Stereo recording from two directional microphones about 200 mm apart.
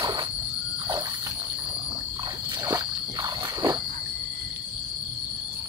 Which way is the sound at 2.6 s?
20° right (ahead or behind).